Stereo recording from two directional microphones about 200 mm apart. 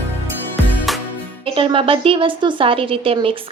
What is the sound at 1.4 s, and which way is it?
A woman's voice, 25° right (ahead or behind).